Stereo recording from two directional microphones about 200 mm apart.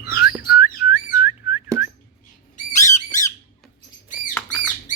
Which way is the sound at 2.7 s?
35° left (ahead or behind).